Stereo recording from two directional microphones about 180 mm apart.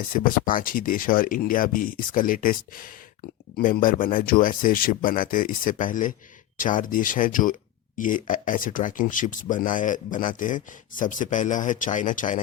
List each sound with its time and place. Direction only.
0.1 s speech: 50° left (ahead or behind)